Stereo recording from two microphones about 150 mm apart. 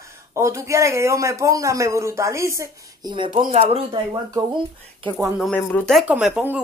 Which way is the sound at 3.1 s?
35° right (ahead or behind).